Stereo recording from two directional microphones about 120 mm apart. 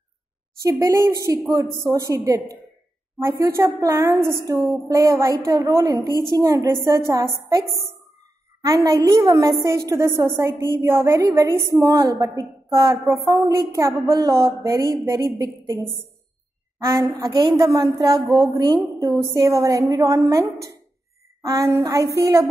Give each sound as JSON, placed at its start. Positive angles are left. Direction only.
{"t": 0.7, "sound": "a woman's voice", "side_deg": -25}
{"t": 8.6, "sound": "a woman's voice", "side_deg": -30}
{"t": 16.7, "sound": "a woman's voice", "side_deg": -30}